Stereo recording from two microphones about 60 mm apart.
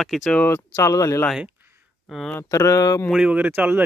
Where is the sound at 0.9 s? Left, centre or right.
Left.